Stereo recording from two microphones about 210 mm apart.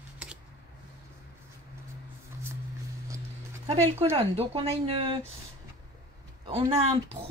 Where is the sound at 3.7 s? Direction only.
30° right (ahead or behind).